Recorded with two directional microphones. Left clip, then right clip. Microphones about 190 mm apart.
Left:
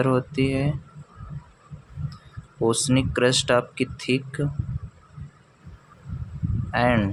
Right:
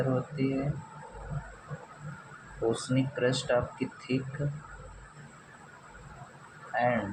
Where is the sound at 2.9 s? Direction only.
55° left (ahead or behind).